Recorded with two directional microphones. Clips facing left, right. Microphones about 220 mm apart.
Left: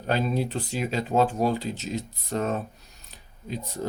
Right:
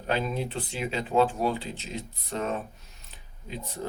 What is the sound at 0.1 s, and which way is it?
Speech, 40° left (ahead or behind).